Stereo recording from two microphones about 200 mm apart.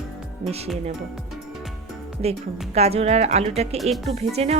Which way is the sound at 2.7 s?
30° right (ahead or behind).